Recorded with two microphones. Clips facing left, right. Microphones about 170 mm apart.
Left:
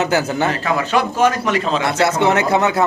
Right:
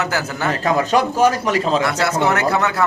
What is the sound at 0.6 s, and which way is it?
Speech, 35° right (ahead or behind).